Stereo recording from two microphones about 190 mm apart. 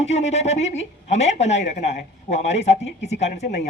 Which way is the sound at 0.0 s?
35° left (ahead or behind).